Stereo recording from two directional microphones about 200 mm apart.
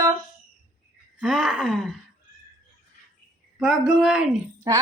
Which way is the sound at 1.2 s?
Centre (ahead or behind).